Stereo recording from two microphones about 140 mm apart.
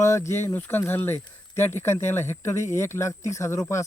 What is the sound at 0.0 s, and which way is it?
Speech, 20° left (ahead or behind).